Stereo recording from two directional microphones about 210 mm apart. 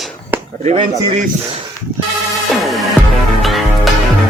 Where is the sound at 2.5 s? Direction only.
Centre (ahead or behind).